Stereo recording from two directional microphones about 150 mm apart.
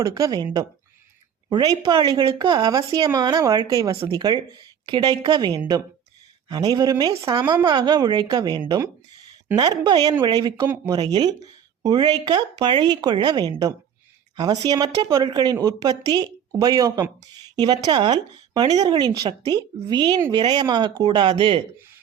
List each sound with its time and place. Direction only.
0.0 s speech: 25° right (ahead or behind)
1.5 s speech: 30° right (ahead or behind)